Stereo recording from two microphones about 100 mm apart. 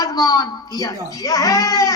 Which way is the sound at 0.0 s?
35° left (ahead or behind).